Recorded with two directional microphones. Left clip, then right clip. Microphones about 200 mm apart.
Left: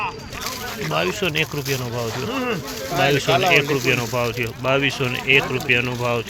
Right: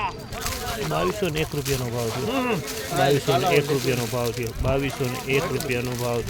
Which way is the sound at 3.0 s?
15° right (ahead or behind).